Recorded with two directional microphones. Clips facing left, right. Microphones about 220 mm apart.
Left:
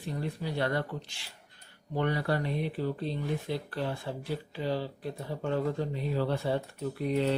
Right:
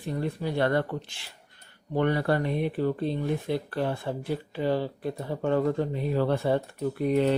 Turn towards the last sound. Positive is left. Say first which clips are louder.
# right 5 dB
turn(degrees=-55)  # may be behind; listen again after turning